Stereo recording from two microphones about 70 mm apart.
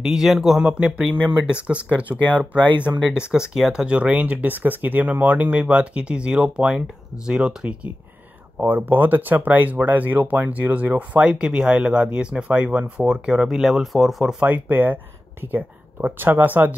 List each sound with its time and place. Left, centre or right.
0.0 s speech: centre
2.2 s speech: left
3.1 s speech: centre
8.5 s speech: right; by 14.3 s centre
14.4 s speech: right